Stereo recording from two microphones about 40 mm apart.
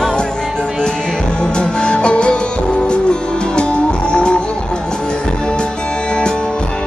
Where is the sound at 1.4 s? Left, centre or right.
Left.